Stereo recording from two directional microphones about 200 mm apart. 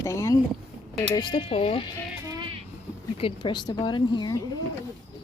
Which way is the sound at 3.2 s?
25° left (ahead or behind).